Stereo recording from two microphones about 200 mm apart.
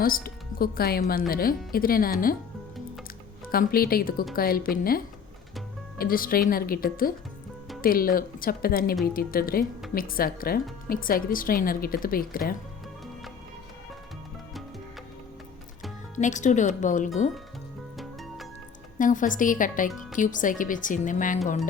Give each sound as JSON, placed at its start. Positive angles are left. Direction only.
{"t": 0.0, "sound": "a woman's voice", "side_deg": 45}
{"t": 3.5, "sound": "a woman's voice", "side_deg": 45}
{"t": 16.1, "sound": "speech", "side_deg": 40}
{"t": 17.9, "sound": "music", "side_deg": 0}
{"t": 18.9, "sound": "speech", "side_deg": 40}